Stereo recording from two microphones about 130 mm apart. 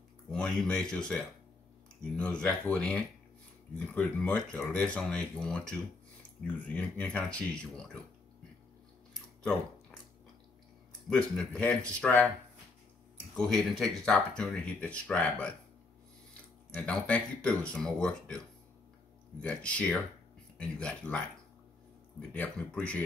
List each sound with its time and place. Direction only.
0.3 s speech: 5° left (ahead or behind)
9.1 s a sound: 5° left (ahead or behind)
11.1 s speech: 5° left (ahead or behind)
13.4 s speech: centre (ahead or behind)
16.7 s speech: 10° left (ahead or behind)
19.4 s speech: 10° left (ahead or behind)
22.3 s speech: 10° left (ahead or behind)